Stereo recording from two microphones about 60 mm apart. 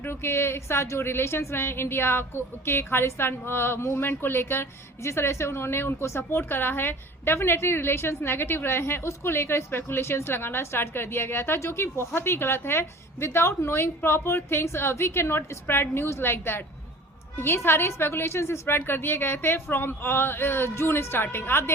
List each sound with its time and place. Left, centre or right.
0.0 s a woman's voice: left